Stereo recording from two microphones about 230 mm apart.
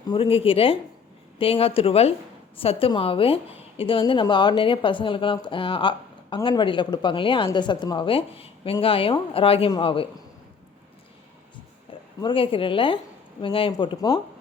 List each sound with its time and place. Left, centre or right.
0.1 s a woman's voice: left
11.9 s a woman's voice: left